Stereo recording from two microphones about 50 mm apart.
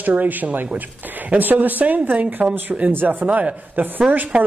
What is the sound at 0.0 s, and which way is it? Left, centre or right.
Speech, right.